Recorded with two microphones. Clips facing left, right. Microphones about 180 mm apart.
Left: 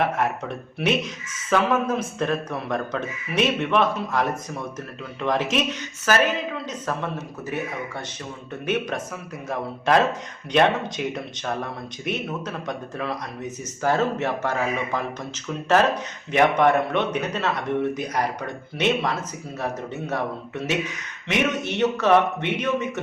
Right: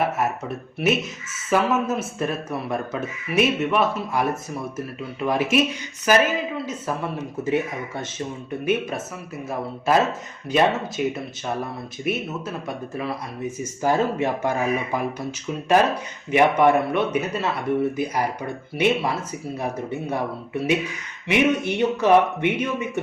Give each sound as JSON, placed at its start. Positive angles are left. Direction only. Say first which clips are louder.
{"t": 0.0, "sound": "speech", "louder": "even", "side_deg": -5}
{"t": 7.4, "sound": "speech", "louder": "right 5 dB", "side_deg": -20}
{"t": 9.5, "sound": "speech", "louder": "even", "side_deg": -5}
{"t": 15.8, "sound": "speech", "louder": "even", "side_deg": -10}